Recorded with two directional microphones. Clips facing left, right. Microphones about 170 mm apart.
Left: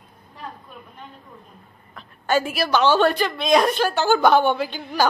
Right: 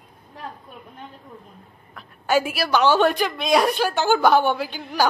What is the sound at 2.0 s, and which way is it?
A woman's voice, 10° right (ahead or behind).